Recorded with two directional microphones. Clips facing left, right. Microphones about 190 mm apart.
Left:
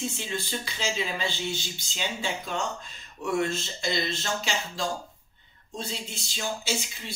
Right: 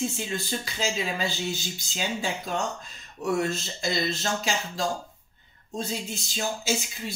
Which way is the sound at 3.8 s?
40° right (ahead or behind).